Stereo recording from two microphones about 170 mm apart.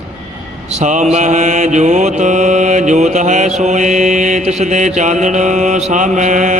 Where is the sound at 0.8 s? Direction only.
45° right (ahead or behind).